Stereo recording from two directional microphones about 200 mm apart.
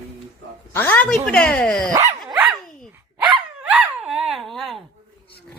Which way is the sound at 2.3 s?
5° right (ahead or behind).